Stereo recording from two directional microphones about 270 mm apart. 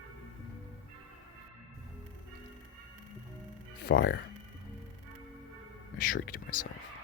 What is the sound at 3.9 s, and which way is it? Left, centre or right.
Speech, left.